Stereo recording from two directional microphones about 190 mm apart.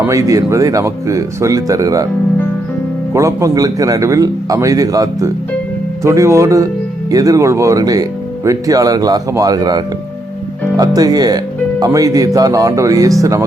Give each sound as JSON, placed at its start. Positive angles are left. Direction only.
{"t": 0.1, "sound": "speech", "side_deg": -15}
{"t": 3.1, "sound": "speech", "side_deg": -15}